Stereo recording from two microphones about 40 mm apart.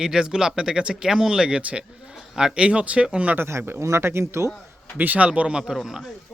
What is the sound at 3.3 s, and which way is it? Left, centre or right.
Speech, right.